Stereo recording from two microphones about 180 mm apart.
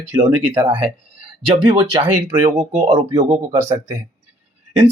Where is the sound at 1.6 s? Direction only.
30° right (ahead or behind).